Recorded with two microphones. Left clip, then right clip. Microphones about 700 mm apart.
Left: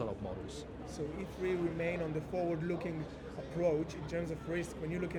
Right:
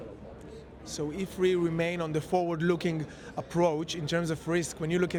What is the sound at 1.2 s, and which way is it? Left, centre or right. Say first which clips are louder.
Speech: right 10 dB; right.